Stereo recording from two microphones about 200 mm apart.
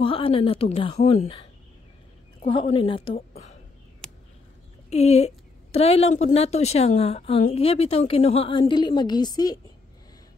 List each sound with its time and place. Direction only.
0.0 s a woman's voice: 25° left (ahead or behind)
4.8 s a woman's voice: 35° left (ahead or behind)